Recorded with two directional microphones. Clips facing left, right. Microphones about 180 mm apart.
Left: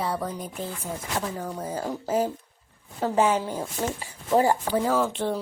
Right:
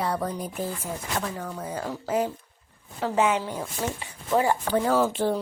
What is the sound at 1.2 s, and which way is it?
A woman's voice, 25° left (ahead or behind).